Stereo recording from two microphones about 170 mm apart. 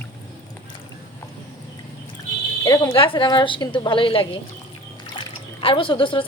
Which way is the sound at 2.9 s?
30° left (ahead or behind).